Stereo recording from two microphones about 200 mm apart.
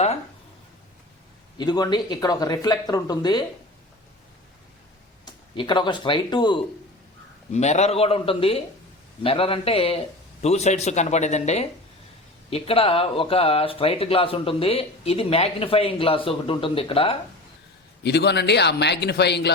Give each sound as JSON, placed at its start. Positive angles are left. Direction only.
{"t": 1.5, "sound": "speech", "side_deg": 20}
{"t": 5.2, "sound": "speech", "side_deg": 25}
{"t": 7.5, "sound": "speech", "side_deg": 35}
{"t": 18.0, "sound": "speech", "side_deg": 55}